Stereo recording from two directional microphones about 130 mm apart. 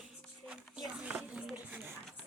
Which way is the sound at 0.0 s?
5° right (ahead or behind).